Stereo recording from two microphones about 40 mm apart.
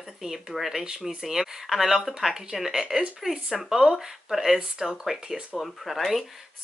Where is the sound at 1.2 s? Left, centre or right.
Centre.